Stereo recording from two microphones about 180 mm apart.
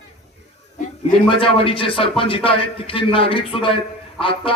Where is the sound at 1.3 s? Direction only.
30° left (ahead or behind).